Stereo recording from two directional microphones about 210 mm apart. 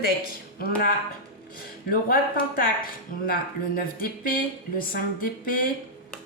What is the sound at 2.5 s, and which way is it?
Speech, 40° left (ahead or behind).